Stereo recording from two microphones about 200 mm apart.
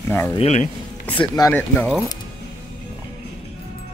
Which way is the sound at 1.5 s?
10° left (ahead or behind).